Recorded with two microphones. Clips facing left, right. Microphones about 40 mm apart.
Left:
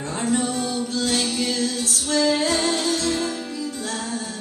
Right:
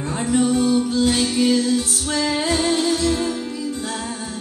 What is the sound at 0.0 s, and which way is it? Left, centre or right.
Music, centre.